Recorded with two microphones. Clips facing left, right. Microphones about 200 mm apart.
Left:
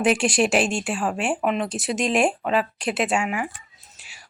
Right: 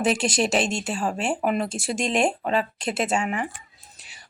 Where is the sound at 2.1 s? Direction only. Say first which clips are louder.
Left 1 dB; 5° left (ahead or behind).